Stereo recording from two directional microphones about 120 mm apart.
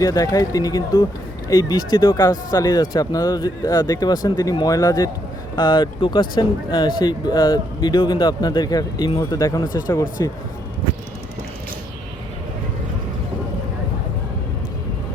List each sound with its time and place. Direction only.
0.0 s speech: 30° left (ahead or behind)
2.6 s speech: 35° left (ahead or behind)